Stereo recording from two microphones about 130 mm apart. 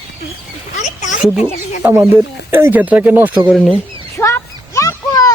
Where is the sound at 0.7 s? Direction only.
70° left (ahead or behind).